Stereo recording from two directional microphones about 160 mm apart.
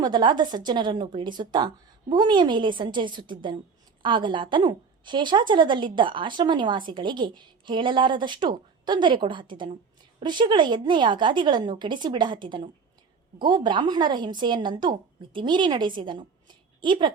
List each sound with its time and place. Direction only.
0.0 s a woman's voice: 30° right (ahead or behind)